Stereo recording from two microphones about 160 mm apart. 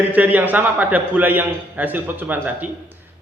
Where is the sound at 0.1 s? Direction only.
10° right (ahead or behind).